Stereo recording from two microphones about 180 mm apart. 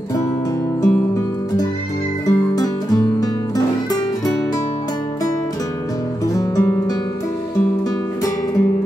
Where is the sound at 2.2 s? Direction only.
20° left (ahead or behind).